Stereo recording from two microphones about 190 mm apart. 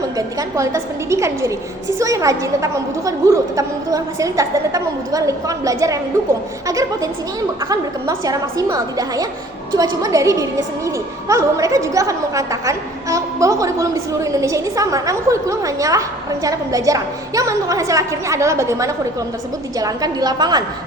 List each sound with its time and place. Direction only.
0.2 s a woman's voice: 20° right (ahead or behind)